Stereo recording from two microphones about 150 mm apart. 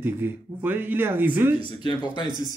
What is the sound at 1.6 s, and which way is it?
Speech, 30° left (ahead or behind).